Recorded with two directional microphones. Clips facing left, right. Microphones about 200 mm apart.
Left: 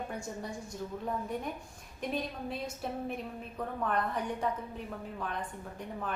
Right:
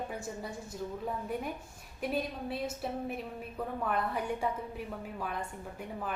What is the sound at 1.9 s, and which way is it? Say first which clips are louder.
A woman's voice: right 2 dB; 5° right (ahead or behind).